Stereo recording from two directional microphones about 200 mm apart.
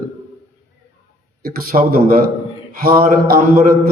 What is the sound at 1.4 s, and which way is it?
Mantra, 45° right (ahead or behind).